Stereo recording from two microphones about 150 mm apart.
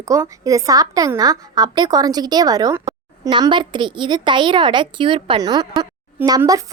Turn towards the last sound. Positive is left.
turn(degrees=-25)  # may be behind; listen again after turning